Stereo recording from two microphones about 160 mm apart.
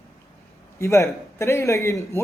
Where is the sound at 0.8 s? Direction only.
20° left (ahead or behind).